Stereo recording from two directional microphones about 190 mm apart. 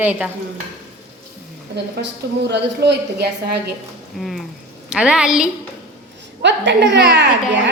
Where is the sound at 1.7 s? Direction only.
65° right (ahead or behind).